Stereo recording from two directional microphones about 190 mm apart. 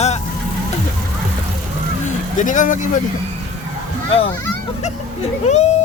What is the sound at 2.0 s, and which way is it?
Speech, 40° left (ahead or behind).